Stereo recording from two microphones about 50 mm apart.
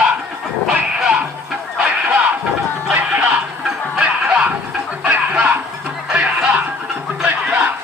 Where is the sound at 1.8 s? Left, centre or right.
Right.